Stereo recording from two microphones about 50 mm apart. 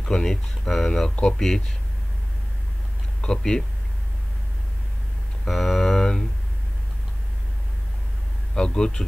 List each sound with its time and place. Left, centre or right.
0.0 s speech: centre
1.1 s speech: left
1.4 s speech: centre
3.2 s speech: centre
5.5 s a sound: centre
8.5 s speech: centre